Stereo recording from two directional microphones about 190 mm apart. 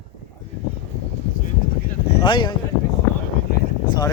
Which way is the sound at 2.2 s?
25° left (ahead or behind).